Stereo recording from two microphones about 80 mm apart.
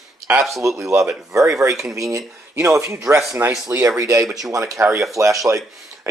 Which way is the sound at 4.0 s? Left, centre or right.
Right.